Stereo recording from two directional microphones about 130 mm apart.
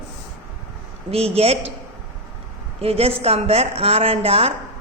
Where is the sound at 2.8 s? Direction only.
50° right (ahead or behind).